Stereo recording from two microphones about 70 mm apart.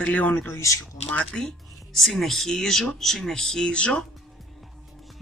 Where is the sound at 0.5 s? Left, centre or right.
Left.